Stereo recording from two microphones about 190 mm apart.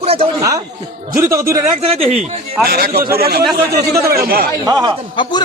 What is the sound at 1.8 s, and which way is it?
Speech, 30° right (ahead or behind).